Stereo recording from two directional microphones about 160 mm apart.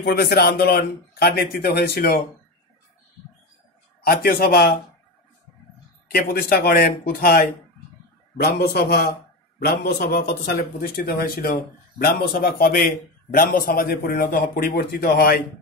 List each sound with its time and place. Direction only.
0.0 s speech: 75° left (ahead or behind)
4.0 s a man's voice: 75° left (ahead or behind)
6.0 s a man's voice: 70° left (ahead or behind)
8.4 s a man's voice: 85° left; by 15.4 s 70° left (ahead or behind)